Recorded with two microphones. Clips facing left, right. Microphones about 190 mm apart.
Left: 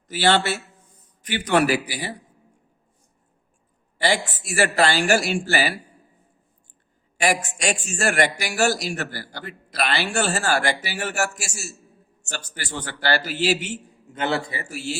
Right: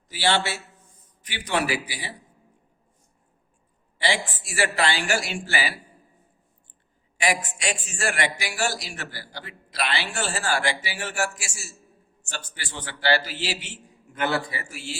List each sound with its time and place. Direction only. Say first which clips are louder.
0.1 s a man's voice: left 4 dB; 55° left (ahead or behind)
3.9 s a man's voice: left 4 dB; 45° left (ahead or behind)
7.6 s a man's voice: left 5 dB; 45° left (ahead or behind)
14.1 s a man's voice: left 1 dB; 25° left (ahead or behind)